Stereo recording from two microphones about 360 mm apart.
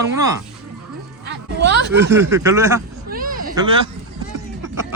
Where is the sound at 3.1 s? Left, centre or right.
Right.